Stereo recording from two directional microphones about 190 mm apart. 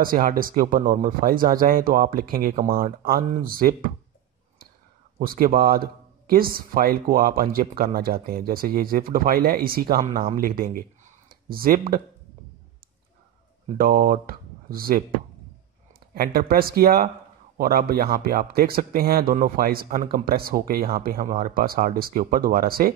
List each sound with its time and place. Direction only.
0.0 s speech: 50° right (ahead or behind)
5.2 s speech: 50° right (ahead or behind)
13.7 s speech: 50° right (ahead or behind)
16.2 s speech: 50° right (ahead or behind)